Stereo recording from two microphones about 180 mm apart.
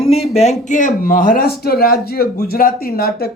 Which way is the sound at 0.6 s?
45° left (ahead or behind).